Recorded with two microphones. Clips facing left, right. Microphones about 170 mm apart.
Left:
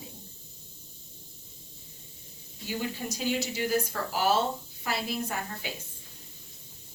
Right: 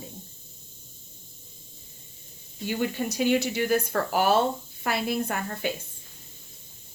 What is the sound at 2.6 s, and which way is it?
Speech, 65° right (ahead or behind).